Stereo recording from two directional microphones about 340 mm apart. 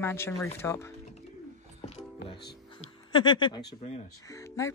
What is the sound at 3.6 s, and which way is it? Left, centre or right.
Music, left.